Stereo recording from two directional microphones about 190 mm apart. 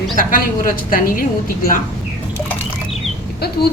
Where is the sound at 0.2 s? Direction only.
45° left (ahead or behind).